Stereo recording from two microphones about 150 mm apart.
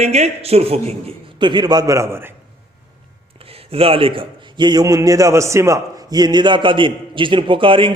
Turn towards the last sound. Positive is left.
turn(degrees=-35)  # may be behind; listen again after turning